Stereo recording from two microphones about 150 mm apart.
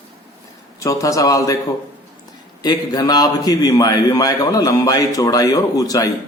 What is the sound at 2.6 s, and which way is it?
A man's voice, 25° left (ahead or behind).